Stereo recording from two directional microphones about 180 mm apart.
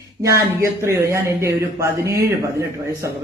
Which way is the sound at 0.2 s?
15° right (ahead or behind).